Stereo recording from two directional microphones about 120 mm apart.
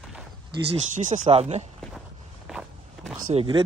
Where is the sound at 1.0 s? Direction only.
90° right.